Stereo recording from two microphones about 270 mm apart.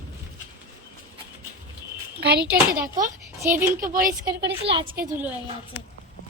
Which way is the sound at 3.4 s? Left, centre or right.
Centre.